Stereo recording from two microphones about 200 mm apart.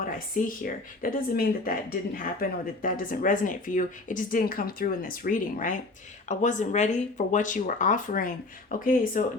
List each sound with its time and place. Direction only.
0.0 s speech: 45° left (ahead or behind)